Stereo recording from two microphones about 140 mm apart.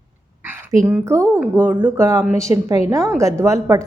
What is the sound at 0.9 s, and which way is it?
A woman's voice, 20° right (ahead or behind).